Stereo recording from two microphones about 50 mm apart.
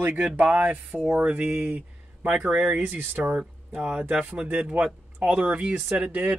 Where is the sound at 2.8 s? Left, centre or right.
Right.